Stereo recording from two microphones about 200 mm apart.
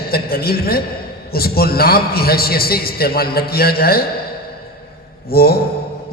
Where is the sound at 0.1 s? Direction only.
50° left (ahead or behind).